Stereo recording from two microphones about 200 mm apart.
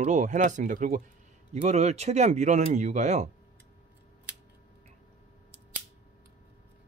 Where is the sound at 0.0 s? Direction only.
35° right (ahead or behind).